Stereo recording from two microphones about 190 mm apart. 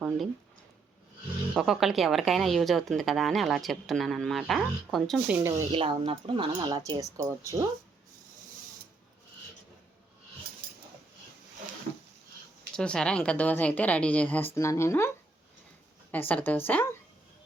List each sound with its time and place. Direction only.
1.5 s a woman's voice: centre (ahead or behind)
5.4 s speech: 15° right (ahead or behind)
5.7 s speech: 30° right (ahead or behind)
12.7 s speech: 5° left (ahead or behind)
16.1 s speech: 10° left (ahead or behind)